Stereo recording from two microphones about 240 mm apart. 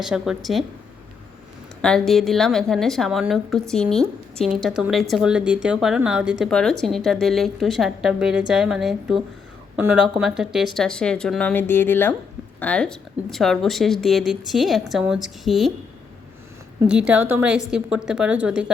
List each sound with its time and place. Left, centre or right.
0.0 s a woman's voice: centre
1.8 s a woman's voice: centre
16.8 s a woman's voice: centre